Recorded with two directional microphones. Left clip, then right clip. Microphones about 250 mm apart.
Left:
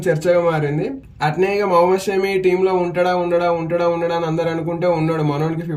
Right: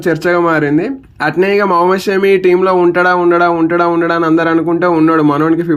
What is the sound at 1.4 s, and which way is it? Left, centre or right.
A man's voice, centre.